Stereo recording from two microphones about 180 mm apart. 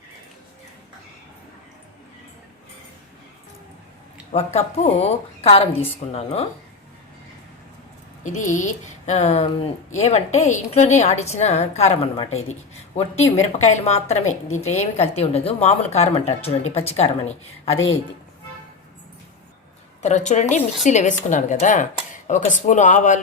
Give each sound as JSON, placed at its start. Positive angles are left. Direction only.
{"t": 4.3, "sound": "a woman's voice", "side_deg": 35}
{"t": 8.2, "sound": "a woman's voice", "side_deg": 45}
{"t": 20.0, "sound": "a woman's voice", "side_deg": 40}